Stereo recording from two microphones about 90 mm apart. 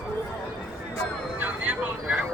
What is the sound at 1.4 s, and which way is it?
Vehicle, 15° right (ahead or behind).